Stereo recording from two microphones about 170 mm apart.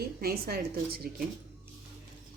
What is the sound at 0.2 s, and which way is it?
Speech, 65° right (ahead or behind).